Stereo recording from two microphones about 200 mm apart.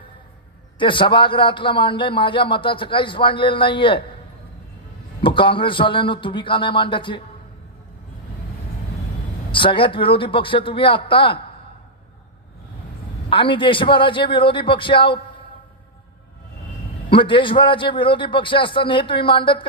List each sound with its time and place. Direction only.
0.8 s a man's voice: 25° left (ahead or behind)
5.2 s a man's voice: 25° left (ahead or behind)
9.5 s a man's voice: 25° left (ahead or behind)
13.3 s a man's voice: 25° left (ahead or behind)
17.1 s a man's voice: 25° left (ahead or behind)